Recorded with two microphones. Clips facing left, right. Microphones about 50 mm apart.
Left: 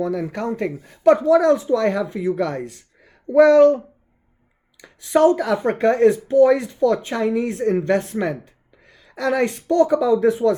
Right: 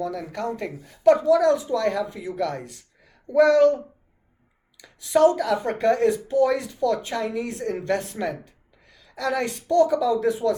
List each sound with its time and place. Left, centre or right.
0.0 s speech: left
4.8 s speech: left